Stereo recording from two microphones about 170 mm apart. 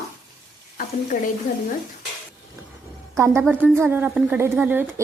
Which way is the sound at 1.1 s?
50° left (ahead or behind).